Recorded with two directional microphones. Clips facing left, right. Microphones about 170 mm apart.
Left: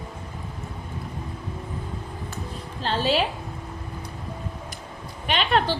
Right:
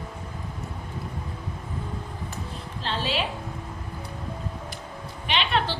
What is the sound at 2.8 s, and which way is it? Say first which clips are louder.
Speech: left 6 dB; 40° left (ahead or behind).